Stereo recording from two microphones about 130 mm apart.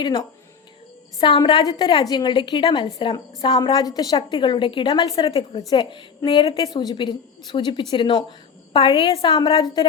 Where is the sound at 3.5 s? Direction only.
30° left (ahead or behind).